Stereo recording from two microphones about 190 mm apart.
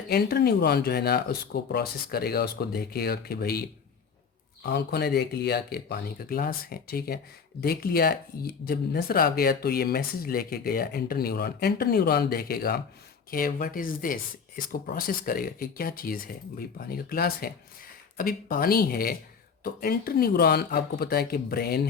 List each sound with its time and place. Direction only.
0.1 s speech: 55° left (ahead or behind)
4.7 s speech: 60° left (ahead or behind)